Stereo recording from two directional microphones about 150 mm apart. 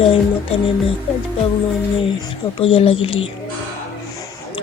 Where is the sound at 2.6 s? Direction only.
40° left (ahead or behind).